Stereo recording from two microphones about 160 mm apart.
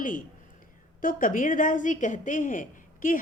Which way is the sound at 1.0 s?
55° left (ahead or behind).